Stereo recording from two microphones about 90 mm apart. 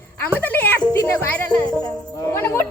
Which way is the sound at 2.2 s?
25° left (ahead or behind).